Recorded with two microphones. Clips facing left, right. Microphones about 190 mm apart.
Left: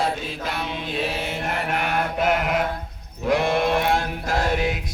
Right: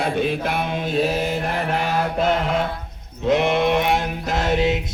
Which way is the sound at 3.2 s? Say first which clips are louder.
Right 2 dB; 20° right (ahead or behind).